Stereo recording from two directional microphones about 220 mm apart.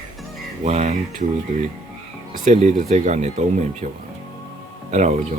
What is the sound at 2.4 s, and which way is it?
Speech, 30° right (ahead or behind).